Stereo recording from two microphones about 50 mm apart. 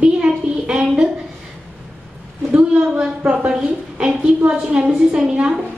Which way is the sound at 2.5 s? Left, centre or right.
Right.